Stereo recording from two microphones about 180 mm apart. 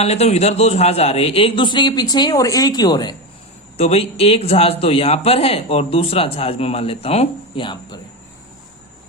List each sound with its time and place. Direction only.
0.0 s a man's voice: 35° left (ahead or behind)
3.8 s a man's voice: 35° left (ahead or behind)